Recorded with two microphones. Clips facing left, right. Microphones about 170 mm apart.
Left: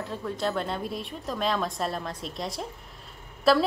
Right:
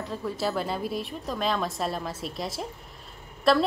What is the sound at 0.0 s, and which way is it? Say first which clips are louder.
A woman's voice: even; centre (ahead or behind).